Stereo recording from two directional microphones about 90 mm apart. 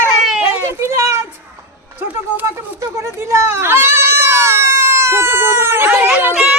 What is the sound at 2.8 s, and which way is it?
Goat, 30° right (ahead or behind).